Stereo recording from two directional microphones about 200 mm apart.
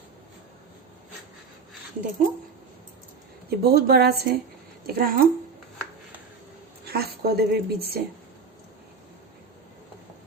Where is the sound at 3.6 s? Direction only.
50° right (ahead or behind).